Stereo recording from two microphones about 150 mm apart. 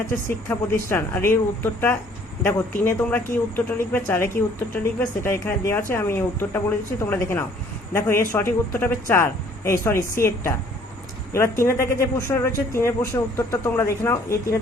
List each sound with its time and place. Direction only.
0.3 s speech: 15° left (ahead or behind)
11.6 s speech: 20° left (ahead or behind)